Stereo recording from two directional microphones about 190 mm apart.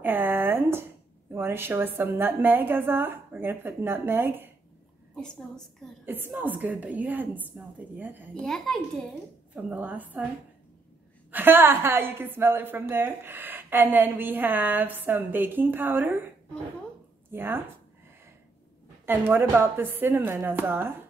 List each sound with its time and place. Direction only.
0.0 s a sound: 10° right (ahead or behind)
1.3 s a woman's voice: 10° right (ahead or behind)
5.1 s a woman's voice: 5° left (ahead or behind)
6.0 s a woman's voice: 10° right (ahead or behind)
8.4 s a child's voice: centre (ahead or behind)
11.3 s a woman's voice: 10° right (ahead or behind)
17.3 s speech: 10° right (ahead or behind)
19.0 s a woman's voice: 10° right (ahead or behind)